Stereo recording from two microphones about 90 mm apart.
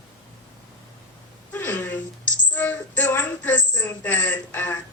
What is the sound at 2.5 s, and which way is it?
A woman's voice, 20° left (ahead or behind).